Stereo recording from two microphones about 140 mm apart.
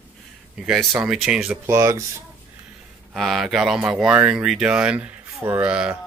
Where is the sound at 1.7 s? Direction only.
20° right (ahead or behind).